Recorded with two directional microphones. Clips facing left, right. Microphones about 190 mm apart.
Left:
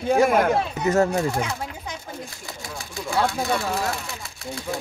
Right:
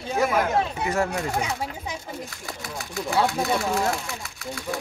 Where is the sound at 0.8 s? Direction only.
40° left (ahead or behind).